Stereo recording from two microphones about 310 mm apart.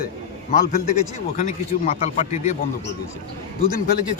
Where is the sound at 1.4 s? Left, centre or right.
Left.